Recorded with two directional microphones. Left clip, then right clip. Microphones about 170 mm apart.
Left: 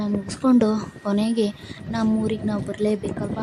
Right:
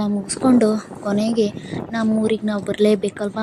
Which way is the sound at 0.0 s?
10° right (ahead or behind).